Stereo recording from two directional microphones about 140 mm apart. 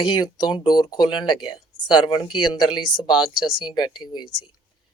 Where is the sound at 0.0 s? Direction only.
30° left (ahead or behind).